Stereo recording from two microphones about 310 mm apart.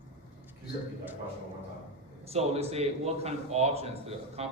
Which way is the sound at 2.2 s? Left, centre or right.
Centre.